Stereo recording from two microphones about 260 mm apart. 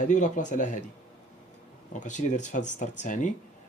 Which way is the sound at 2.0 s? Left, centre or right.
Left.